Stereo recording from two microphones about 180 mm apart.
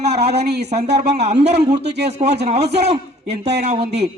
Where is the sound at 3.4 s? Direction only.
65° right (ahead or behind).